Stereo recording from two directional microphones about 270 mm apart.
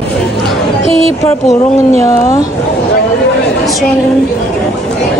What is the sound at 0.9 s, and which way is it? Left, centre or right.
Speech, right.